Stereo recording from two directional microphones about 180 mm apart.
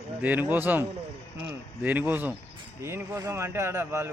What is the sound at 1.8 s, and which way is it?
A man's voice, 10° right (ahead or behind).